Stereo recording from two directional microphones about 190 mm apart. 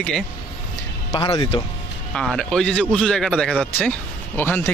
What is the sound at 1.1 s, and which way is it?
Speech, 25° left (ahead or behind).